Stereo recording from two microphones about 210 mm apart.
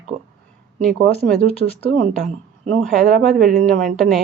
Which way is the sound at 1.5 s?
30° left (ahead or behind).